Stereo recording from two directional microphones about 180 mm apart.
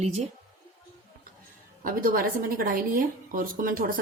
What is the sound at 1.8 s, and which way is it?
A woman's voice, 50° right (ahead or behind).